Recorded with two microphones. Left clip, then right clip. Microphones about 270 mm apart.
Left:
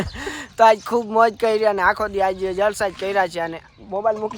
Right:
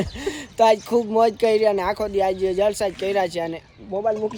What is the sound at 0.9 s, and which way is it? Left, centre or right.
Speech, centre.